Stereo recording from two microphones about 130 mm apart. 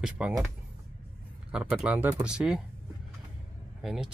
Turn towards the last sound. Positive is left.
turn(degrees=-5)  # may be behind; listen again after turning